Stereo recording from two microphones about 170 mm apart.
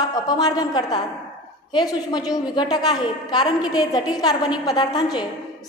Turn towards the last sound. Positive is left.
turn(degrees=25)  # may be behind; listen again after turning